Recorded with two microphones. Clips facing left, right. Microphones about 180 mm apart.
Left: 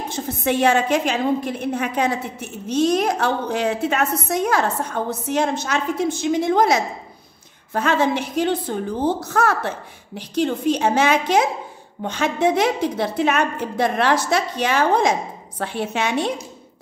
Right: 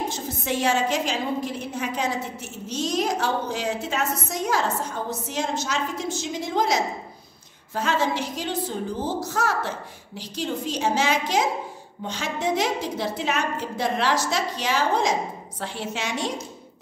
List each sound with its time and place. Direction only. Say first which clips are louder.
0.1 s a woman's voice: left 6 dB; 60° left (ahead or behind)